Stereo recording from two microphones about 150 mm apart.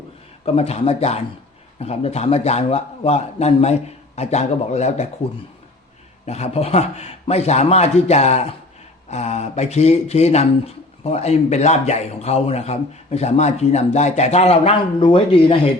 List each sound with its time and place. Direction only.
0.4 s a man's voice: 45° left (ahead or behind)
6.2 s a man's voice: 45° left (ahead or behind)